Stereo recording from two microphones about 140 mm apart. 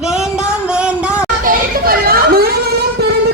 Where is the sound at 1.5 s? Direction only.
90° right.